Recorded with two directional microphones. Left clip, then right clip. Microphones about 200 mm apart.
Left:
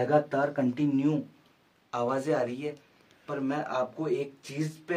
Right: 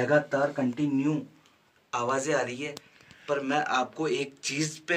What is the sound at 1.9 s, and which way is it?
Speech, 50° left (ahead or behind).